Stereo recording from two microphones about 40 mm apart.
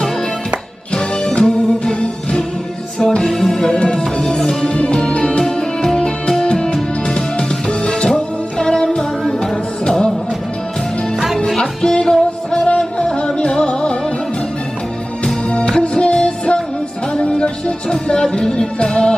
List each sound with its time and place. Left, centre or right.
0.9 s music: left
5.4 s music: centre
11.5 s music: left
12.6 s music: left
15.2 s music: left